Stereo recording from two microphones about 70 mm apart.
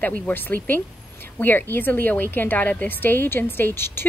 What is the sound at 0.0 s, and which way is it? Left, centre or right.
A woman's voice, left.